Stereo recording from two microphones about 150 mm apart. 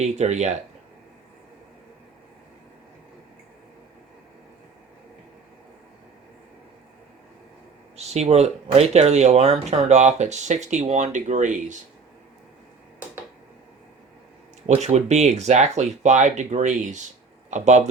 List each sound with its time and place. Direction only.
0.0 s speech: 50° right (ahead or behind)
7.9 s speech: 45° right (ahead or behind)
14.7 s speech: 50° right (ahead or behind)